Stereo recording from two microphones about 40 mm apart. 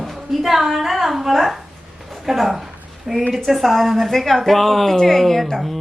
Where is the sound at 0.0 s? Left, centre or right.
Centre.